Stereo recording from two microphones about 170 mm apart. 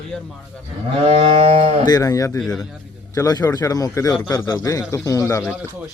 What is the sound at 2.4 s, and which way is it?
Speech, 5° left (ahead or behind).